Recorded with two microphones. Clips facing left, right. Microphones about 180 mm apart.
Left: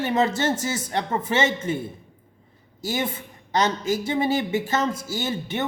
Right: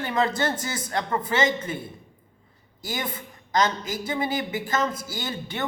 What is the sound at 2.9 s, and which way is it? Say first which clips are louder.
A woman's voice: left 5 dB; 25° left (ahead or behind).